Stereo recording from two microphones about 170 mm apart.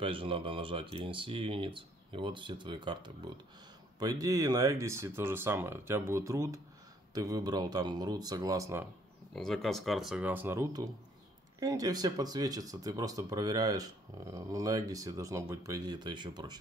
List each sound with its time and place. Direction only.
0.0 s speech: 30° right (ahead or behind)
9.3 s speech: centre (ahead or behind); by 16.5 s 25° right (ahead or behind)